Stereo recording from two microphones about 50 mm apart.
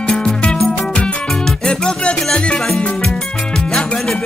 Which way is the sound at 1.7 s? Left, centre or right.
Centre.